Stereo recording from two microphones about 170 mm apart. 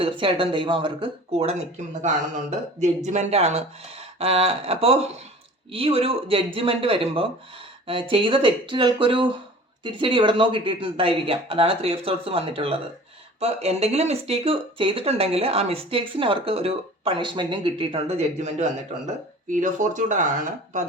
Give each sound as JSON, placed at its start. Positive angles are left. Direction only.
{"t": 0.0, "sound": "speech", "side_deg": -30}